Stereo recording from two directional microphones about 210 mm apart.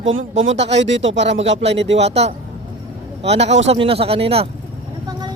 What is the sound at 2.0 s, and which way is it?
A man's voice, 30° right (ahead or behind).